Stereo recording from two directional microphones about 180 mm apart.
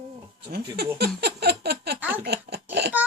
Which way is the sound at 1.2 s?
65° right (ahead or behind).